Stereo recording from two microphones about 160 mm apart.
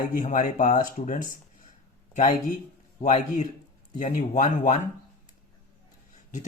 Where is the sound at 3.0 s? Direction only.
45° left (ahead or behind).